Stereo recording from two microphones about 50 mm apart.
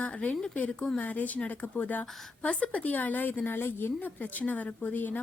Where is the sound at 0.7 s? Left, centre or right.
Centre.